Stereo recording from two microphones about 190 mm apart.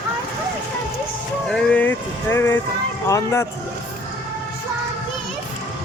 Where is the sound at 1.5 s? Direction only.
5° left (ahead or behind).